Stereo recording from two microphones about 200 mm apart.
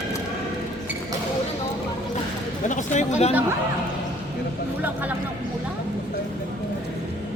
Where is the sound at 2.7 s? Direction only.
40° left (ahead or behind).